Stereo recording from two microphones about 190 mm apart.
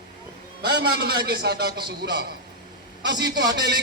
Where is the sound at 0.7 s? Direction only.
60° right (ahead or behind).